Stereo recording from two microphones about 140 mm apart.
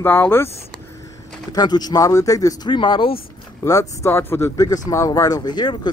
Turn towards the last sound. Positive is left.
turn(degrees=30)  # may be behind; listen again after turning